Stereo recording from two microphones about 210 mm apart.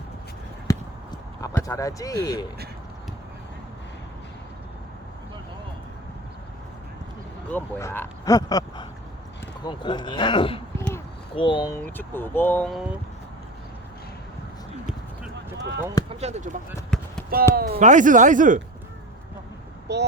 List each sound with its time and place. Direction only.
0.7 s a sound: 15° left (ahead or behind)
1.4 s speech: 15° left (ahead or behind)
7.5 s speech: 10° left (ahead or behind)
10.8 s a sound: 10° left (ahead or behind)
11.3 s speech: 25° left (ahead or behind)
11.8 s speech: 10° left (ahead or behind)
16.0 s speech: 30° right (ahead or behind)
16.9 s basketball bounce: 5° left (ahead or behind)
17.5 s speech: 40° right (ahead or behind)
19.9 s speech: 55° right (ahead or behind)